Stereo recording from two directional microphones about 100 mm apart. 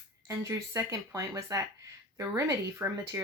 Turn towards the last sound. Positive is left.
turn(degrees=-30)  # may be behind; listen again after turning